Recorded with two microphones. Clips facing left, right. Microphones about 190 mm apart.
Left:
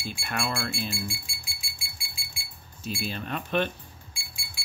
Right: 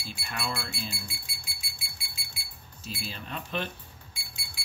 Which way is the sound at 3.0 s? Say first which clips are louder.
Left 5 dB; 60° left (ahead or behind).